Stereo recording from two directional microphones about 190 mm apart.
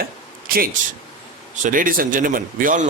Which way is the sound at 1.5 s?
40° right (ahead or behind).